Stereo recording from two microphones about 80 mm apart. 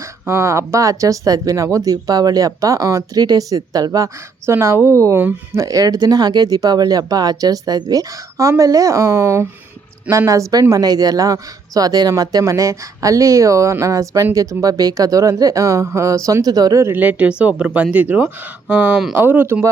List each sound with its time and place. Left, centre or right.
0.3 s speech: right
4.5 s speech: right
5.5 s speech: right
16.8 s speech: right